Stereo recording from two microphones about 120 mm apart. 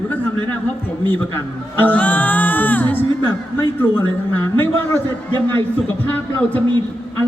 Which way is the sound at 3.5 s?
20° left (ahead or behind).